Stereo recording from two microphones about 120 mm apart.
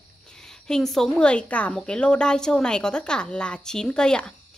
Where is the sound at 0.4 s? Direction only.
5° left (ahead or behind).